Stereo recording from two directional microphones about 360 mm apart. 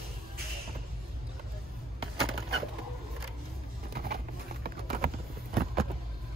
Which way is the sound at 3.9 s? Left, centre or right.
Right.